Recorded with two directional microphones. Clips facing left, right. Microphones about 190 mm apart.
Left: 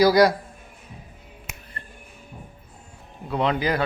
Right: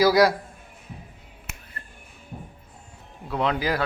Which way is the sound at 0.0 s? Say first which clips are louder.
Left 2 dB; centre (ahead or behind).